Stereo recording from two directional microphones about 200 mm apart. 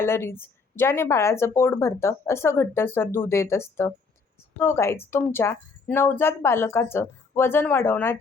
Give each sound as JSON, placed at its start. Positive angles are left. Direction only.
{"t": 0.0, "sound": "speech", "side_deg": 10}